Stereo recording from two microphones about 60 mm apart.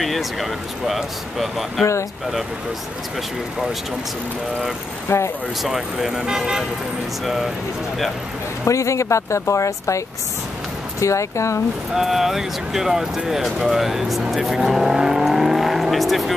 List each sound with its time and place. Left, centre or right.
0.0 s speech: centre
5.0 s speech: left
5.6 s speech: centre
8.6 s speech: left
11.9 s speech: centre